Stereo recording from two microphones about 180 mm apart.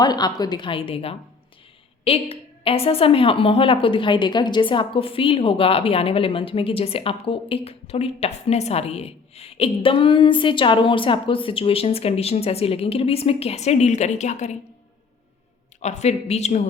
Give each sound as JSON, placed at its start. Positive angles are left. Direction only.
{"t": 0.0, "sound": "a woman's voice", "side_deg": 20}
{"t": 15.8, "sound": "a woman's voice", "side_deg": 40}